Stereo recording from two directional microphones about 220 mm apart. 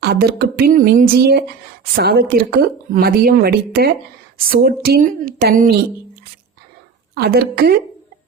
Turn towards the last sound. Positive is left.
turn(degrees=-45)  # may be behind; listen again after turning